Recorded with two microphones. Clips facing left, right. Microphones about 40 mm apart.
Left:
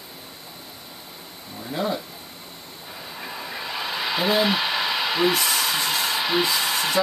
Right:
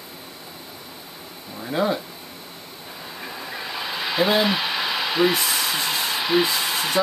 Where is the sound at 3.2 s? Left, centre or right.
Centre.